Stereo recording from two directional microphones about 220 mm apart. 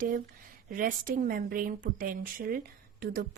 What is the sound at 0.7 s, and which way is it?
Speech, 40° right (ahead or behind).